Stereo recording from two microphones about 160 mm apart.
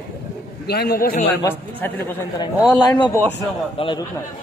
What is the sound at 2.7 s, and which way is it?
A man's voice, 25° left (ahead or behind).